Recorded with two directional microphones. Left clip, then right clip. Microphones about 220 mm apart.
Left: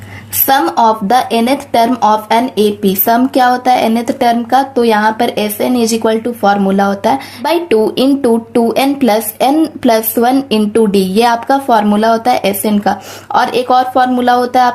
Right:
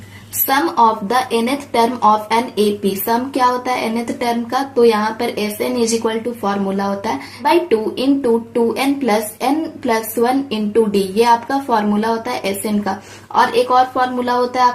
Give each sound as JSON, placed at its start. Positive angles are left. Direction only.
{"t": 0.4, "sound": "speech", "side_deg": 40}